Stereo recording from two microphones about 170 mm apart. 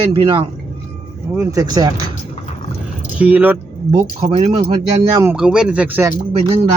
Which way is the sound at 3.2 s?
10° right (ahead or behind).